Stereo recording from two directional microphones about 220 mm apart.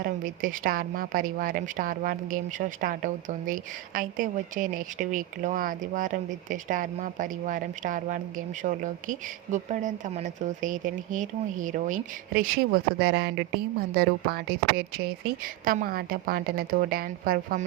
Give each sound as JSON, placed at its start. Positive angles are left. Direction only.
{"t": 0.0, "sound": "a woman's voice", "side_deg": -40}